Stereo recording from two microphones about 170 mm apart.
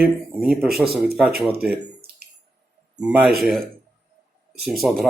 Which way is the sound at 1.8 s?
65° right (ahead or behind).